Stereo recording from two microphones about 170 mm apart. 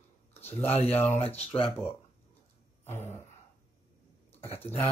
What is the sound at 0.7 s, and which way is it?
Speech, 35° left (ahead or behind).